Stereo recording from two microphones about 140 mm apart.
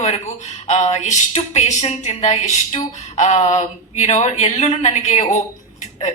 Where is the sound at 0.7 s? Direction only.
55° left (ahead or behind).